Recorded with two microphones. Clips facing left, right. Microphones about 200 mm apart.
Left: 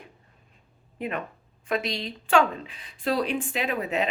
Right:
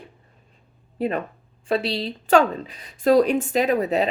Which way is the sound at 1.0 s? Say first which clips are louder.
Right 7 dB; 35° right (ahead or behind).